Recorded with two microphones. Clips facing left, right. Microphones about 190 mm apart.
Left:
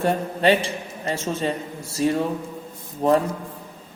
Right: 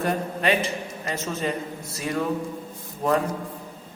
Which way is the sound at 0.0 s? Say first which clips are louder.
Left 4 dB; 30° left (ahead or behind).